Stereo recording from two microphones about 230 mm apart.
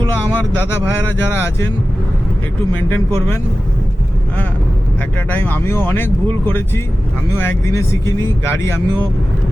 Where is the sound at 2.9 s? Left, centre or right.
Centre.